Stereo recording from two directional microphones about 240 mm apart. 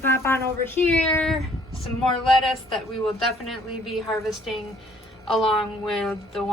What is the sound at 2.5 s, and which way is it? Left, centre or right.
A woman's voice, centre.